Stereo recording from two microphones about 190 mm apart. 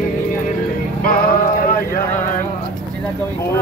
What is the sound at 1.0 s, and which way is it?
Music, 50° left (ahead or behind).